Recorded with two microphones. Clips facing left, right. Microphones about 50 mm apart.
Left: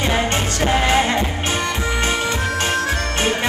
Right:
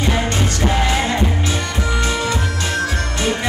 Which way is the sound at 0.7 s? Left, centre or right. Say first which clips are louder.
Left 3 dB; left.